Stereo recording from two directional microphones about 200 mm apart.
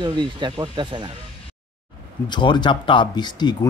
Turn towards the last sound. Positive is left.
turn(degrees=20)  # may be behind; listen again after turning